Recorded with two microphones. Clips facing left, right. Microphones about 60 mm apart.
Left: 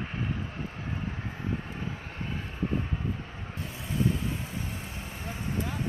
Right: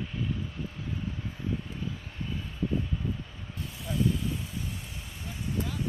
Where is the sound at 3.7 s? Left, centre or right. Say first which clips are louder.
Even; left.